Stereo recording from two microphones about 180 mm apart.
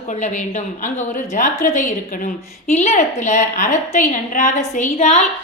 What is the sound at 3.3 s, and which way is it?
A woman's voice, 40° left (ahead or behind).